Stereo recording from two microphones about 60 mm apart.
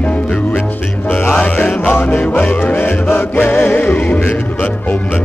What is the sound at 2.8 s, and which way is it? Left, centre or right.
Music, left.